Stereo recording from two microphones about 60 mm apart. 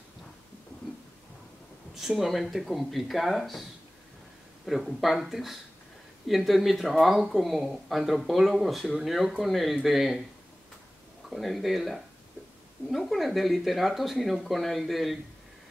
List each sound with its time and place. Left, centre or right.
2.0 s speech: centre
4.6 s speech: centre
11.2 s speech: centre